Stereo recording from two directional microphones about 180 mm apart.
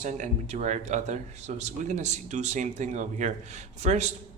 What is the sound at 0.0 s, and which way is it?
Speech, 40° right (ahead or behind).